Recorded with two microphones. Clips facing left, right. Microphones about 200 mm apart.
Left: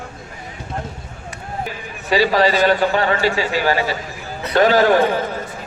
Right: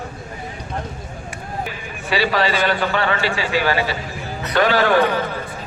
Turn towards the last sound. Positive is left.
turn(degrees=40)  # may be behind; listen again after turning